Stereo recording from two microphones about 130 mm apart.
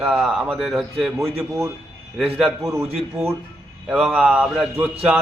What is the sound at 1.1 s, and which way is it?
Speech, 20° right (ahead or behind).